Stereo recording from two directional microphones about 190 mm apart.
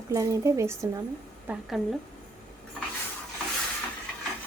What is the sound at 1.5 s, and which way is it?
Speech, centre (ahead or behind).